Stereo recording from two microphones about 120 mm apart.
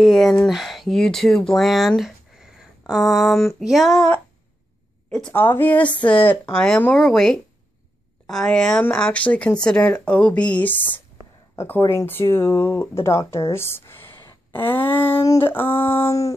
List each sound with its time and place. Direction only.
0.0 s speech: 5° left (ahead or behind)
5.3 s a woman's voice: 20° left (ahead or behind)
15.2 s a sound: 20° left (ahead or behind)